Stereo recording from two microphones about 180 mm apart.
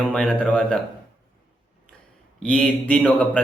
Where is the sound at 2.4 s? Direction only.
5° left (ahead or behind).